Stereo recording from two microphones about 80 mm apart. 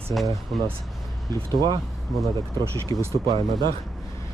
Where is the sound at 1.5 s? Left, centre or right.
Right.